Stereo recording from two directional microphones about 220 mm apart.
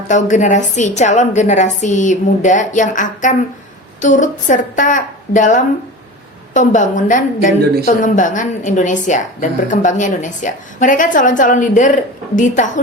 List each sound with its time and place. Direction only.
0.1 s a woman's voice: 35° left (ahead or behind)